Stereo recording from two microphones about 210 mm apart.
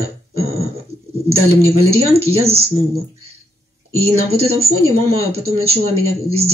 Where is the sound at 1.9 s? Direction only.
30° right (ahead or behind).